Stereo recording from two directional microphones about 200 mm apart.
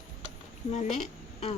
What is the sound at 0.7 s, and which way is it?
Speech, 35° left (ahead or behind).